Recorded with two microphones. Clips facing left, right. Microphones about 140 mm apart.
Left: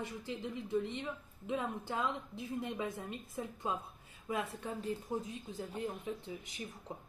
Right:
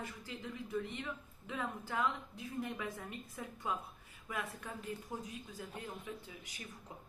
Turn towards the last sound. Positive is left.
turn(degrees=25)  # may be behind; listen again after turning